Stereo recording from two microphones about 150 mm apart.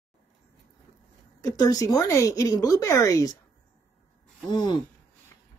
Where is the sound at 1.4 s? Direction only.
25° left (ahead or behind).